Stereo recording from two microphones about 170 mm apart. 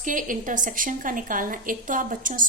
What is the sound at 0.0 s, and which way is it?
A woman's voice, 50° right (ahead or behind).